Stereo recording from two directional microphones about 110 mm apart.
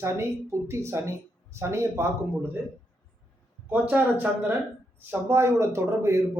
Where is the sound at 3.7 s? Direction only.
15° right (ahead or behind).